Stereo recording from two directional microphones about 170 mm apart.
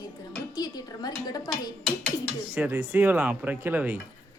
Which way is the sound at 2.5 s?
10° right (ahead or behind).